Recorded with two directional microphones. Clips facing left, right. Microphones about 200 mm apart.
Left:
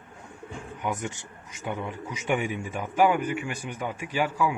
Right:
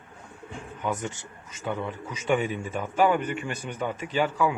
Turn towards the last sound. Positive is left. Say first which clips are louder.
# right 1 dB
turn(degrees=10)  # may be behind; listen again after turning